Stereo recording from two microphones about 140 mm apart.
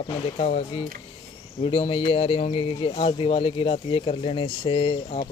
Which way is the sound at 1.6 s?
40° left (ahead or behind).